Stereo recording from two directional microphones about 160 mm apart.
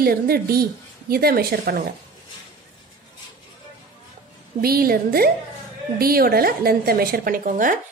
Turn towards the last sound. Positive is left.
turn(degrees=-55)  # may be behind; listen again after turning